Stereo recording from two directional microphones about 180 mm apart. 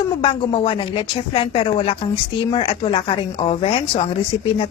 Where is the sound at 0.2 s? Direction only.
30° left (ahead or behind).